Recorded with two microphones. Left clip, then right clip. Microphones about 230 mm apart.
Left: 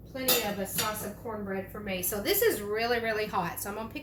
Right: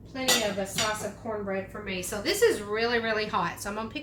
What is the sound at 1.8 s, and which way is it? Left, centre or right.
A woman's voice, centre.